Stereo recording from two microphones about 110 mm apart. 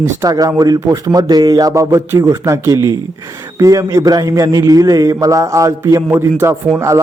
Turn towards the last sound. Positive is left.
turn(degrees=-25)  # may be behind; listen again after turning